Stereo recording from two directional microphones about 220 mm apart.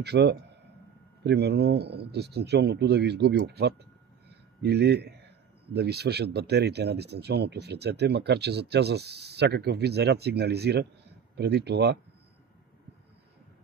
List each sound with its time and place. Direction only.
0.0 s speech: 50° right (ahead or behind)